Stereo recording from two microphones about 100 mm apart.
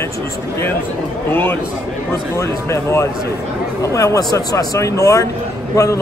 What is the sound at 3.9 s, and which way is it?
Speech, 35° left (ahead or behind).